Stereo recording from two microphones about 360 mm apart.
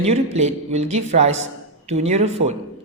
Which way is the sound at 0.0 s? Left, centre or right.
Centre.